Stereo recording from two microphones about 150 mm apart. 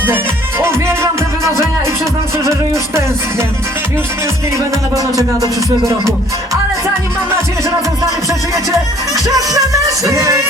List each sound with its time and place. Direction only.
0.6 s music: 15° right (ahead or behind)
2.4 s music: 20° right (ahead or behind)
4.5 s music: 25° right (ahead or behind)
8.0 s music: 20° right (ahead or behind)